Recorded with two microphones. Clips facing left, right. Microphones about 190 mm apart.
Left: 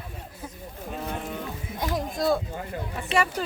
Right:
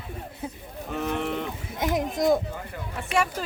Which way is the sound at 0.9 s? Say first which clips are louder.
Right 6 dB; 75° right (ahead or behind).